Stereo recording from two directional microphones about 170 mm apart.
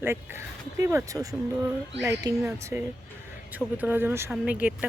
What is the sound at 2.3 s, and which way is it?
Speech, 15° right (ahead or behind).